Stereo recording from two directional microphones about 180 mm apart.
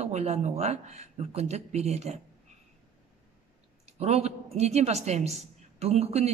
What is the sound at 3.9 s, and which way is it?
A woman's voice, 35° right (ahead or behind).